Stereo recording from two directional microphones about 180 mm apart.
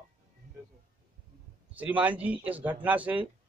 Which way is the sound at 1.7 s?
10° right (ahead or behind).